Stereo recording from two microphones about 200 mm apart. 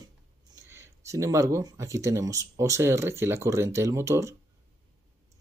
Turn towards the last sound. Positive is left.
turn(degrees=-15)  # may be behind; listen again after turning